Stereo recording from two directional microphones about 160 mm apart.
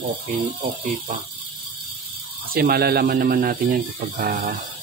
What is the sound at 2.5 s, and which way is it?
Speech, 75° right (ahead or behind).